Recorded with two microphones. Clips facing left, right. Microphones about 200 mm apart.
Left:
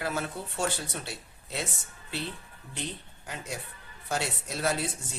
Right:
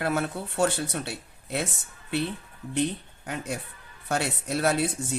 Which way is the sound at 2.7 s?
60° right (ahead or behind).